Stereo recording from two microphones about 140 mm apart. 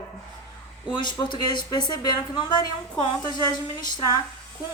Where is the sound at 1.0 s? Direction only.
35° left (ahead or behind).